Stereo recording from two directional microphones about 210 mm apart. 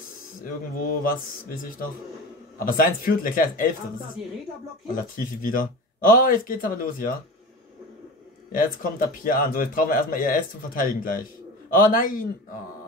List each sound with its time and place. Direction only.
0.4 s speech: 45° left (ahead or behind)
5.1 s speech: 40° left (ahead or behind)
8.5 s speech: 40° left (ahead or behind)